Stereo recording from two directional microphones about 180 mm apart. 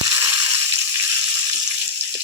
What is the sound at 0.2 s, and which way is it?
Crushing, 15° right (ahead or behind).